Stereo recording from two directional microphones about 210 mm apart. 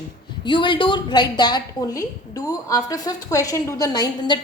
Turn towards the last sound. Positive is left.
turn(degrees=15)  # may be behind; listen again after turning